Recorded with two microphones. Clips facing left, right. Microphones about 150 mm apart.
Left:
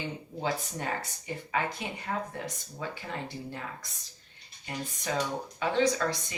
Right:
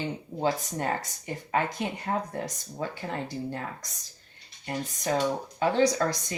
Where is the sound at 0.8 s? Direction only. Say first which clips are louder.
Right 4 dB; 45° right (ahead or behind).